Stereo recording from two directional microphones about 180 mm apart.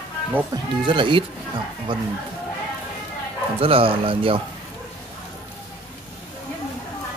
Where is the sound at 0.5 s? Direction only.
25° right (ahead or behind).